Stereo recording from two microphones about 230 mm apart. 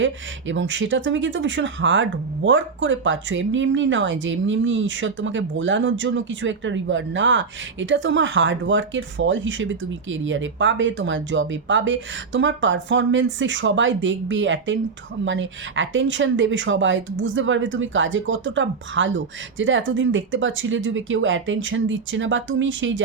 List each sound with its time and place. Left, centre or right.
0.0 s a woman's voice: right